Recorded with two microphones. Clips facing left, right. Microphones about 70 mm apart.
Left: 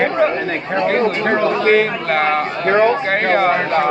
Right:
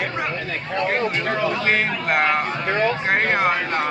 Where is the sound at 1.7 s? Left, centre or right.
Centre.